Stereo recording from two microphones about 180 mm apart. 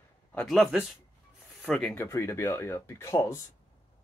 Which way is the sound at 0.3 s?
5° left (ahead or behind).